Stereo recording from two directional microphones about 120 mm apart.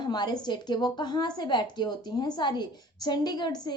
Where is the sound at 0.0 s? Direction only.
35° left (ahead or behind).